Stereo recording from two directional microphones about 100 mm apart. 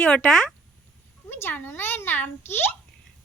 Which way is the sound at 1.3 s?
25° left (ahead or behind).